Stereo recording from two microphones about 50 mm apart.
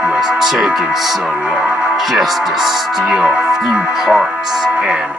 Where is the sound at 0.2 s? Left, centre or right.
Centre.